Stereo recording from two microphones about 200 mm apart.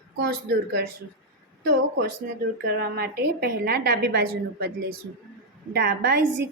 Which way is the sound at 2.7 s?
50° right (ahead or behind).